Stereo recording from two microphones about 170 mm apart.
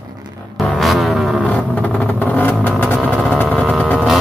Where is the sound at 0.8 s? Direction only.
Centre (ahead or behind).